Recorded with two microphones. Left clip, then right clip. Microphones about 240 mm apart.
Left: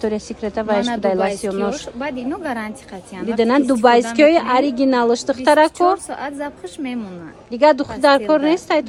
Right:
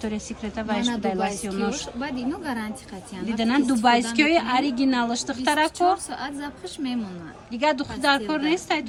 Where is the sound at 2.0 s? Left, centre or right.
Left.